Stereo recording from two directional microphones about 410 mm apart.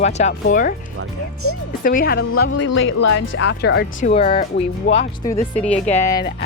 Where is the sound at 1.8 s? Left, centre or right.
Left.